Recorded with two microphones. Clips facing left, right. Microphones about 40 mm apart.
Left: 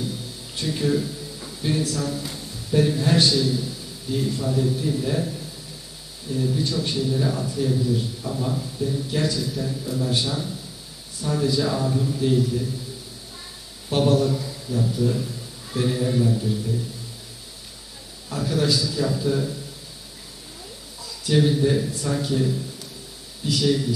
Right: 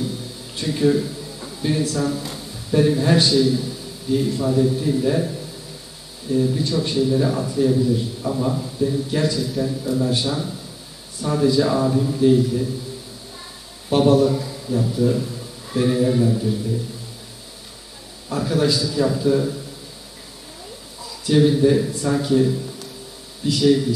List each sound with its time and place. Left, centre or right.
0.6 s a man's voice: centre
6.3 s a man's voice: centre
12.2 s a man's voice: centre
13.8 s a man's voice: centre
18.3 s a man's voice: centre
21.0 s a man's voice: centre